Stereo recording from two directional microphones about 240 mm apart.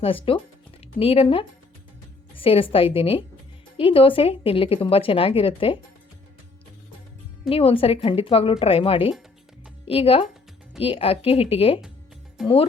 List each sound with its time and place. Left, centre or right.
0.0 s speech: left
7.5 s speech: left
12.4 s speech: centre